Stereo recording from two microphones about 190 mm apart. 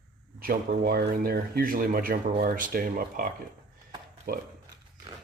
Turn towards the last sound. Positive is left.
turn(degrees=-55)  # may be behind; listen again after turning